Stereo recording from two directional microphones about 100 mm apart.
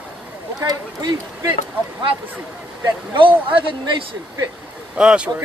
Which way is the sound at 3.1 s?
60° right (ahead or behind).